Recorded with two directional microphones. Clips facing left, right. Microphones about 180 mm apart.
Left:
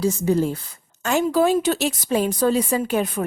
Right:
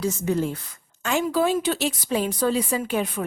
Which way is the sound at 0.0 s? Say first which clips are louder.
Left 4 dB; 35° left (ahead or behind).